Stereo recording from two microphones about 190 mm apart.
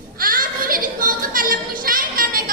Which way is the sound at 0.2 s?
50° right (ahead or behind).